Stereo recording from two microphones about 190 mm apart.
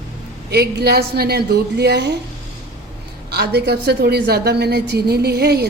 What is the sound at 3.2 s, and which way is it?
A woman's voice, 60° right (ahead or behind).